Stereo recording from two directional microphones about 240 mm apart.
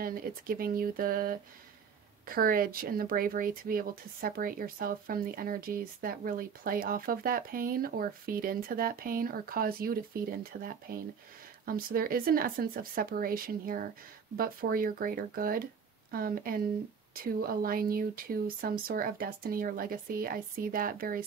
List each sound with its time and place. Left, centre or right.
0.0 s speech: right